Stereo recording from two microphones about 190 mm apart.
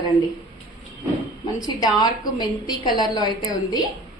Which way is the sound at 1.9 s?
20° left (ahead or behind).